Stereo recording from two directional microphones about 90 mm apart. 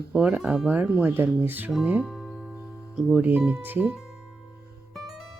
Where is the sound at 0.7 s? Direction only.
20° right (ahead or behind).